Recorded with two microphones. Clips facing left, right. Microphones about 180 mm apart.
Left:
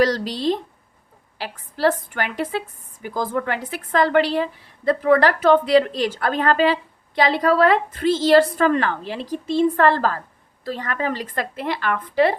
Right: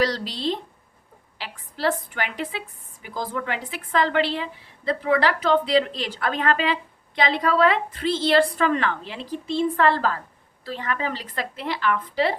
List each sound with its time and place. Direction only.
0.0 s a woman's voice: 45° left (ahead or behind)